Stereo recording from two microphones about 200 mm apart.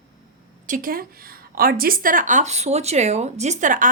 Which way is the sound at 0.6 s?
45° right (ahead or behind).